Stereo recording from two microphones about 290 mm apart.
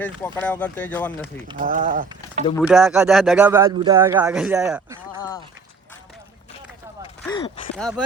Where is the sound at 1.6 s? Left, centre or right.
Right.